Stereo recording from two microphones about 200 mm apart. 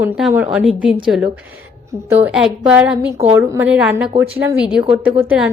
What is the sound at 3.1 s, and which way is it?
Speech, 30° right (ahead or behind).